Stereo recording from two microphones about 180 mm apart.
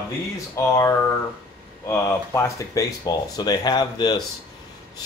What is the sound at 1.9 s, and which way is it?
Speech, 15° left (ahead or behind).